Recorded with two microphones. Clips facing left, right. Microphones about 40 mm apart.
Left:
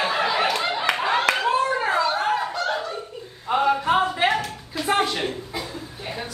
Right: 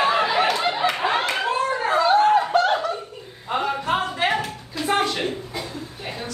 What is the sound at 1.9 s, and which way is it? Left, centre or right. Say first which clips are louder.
Chatter: right 8 dB; right.